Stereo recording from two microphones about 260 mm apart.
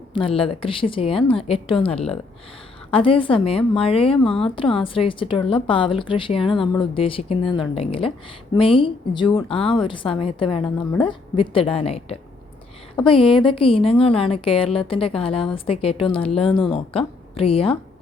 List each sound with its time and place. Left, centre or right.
0.1 s a woman's voice: centre